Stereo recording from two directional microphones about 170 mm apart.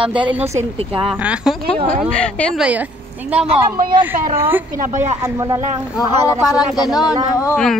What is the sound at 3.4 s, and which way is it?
Speech, 35° right (ahead or behind).